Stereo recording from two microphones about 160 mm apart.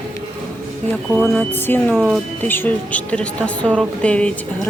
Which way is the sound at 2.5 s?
10° left (ahead or behind).